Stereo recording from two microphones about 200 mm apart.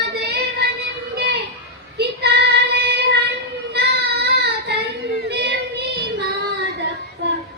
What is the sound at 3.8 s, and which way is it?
Child singing, 55° right (ahead or behind).